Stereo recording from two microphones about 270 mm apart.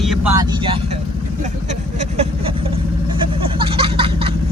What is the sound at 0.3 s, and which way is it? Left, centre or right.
Speech, centre.